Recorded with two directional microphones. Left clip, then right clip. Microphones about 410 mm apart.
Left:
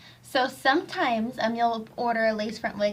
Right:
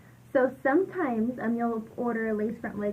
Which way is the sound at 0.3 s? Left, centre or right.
Centre.